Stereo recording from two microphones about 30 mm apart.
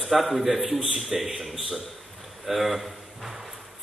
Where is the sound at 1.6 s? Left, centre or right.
Centre.